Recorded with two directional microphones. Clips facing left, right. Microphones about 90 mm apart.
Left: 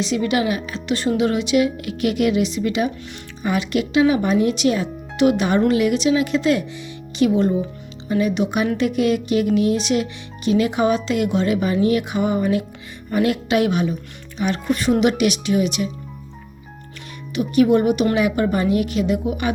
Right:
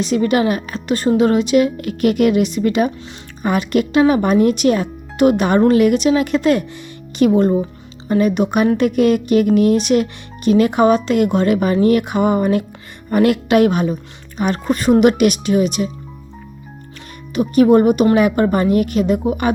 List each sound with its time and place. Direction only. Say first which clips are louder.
0.0 s speech: right 4 dB; 45° right (ahead or behind)
17.3 s speech: right 4 dB; 40° right (ahead or behind)